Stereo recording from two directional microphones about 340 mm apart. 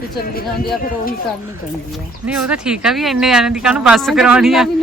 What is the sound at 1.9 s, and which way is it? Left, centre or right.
Speech, centre.